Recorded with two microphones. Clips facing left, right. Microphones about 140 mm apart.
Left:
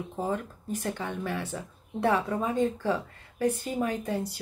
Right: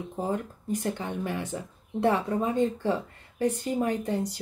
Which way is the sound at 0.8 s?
20° right (ahead or behind).